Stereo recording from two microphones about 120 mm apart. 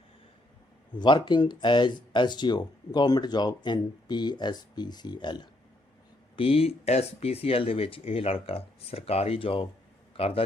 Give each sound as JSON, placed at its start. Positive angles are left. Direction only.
{"t": 0.9, "sound": "speech", "side_deg": 40}
{"t": 6.3, "sound": "speech", "side_deg": 50}